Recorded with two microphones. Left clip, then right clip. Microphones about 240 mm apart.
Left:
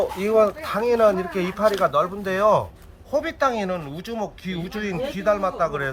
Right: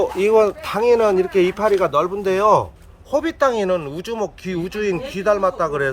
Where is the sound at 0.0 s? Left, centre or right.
Right.